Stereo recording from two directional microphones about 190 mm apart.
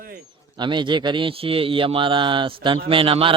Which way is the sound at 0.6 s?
25° right (ahead or behind).